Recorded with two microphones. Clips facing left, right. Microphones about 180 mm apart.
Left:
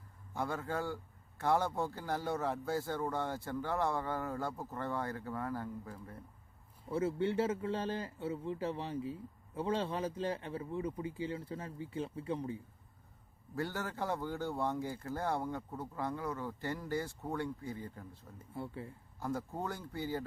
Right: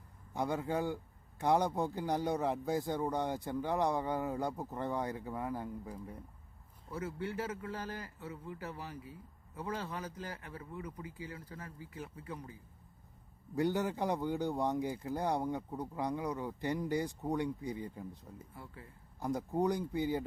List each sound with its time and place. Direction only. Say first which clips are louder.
0.3 s a man's voice: right 3 dB; 15° right (ahead or behind)
6.9 s a man's voice: left 6 dB; 25° left (ahead or behind)
13.6 s a man's voice: right 5 dB; 15° right (ahead or behind)
18.5 s a man's voice: left 14 dB; 30° left (ahead or behind)
19.2 s a man's voice: right 5 dB; 15° right (ahead or behind)